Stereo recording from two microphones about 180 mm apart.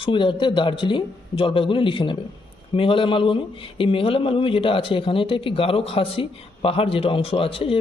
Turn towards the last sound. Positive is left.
turn(degrees=30)  # may be behind; listen again after turning